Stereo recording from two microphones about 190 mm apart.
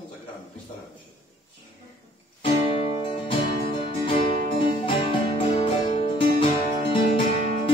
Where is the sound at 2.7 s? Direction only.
30° left (ahead or behind).